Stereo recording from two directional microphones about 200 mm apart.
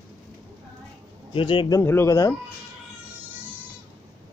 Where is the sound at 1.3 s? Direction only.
25° left (ahead or behind).